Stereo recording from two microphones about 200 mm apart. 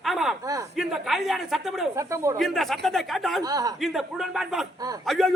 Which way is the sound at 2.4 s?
Centre (ahead or behind).